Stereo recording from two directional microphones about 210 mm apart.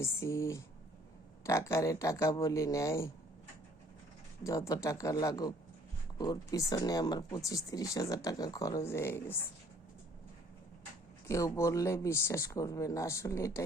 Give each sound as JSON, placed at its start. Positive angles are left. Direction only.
{"t": 0.0, "sound": "speech", "side_deg": 15}
{"t": 4.4, "sound": "speech", "side_deg": 15}
{"t": 11.3, "sound": "speech", "side_deg": 15}